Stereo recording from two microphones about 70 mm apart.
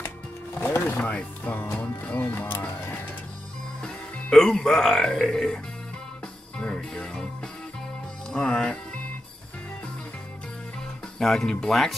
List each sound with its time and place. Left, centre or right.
0.6 s music: left
3.8 s speech: centre
6.5 s music: centre
8.3 s music: centre
11.1 s speech: centre